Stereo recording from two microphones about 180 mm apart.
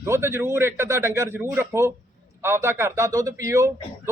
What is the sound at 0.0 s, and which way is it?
A man's voice, 15° right (ahead or behind).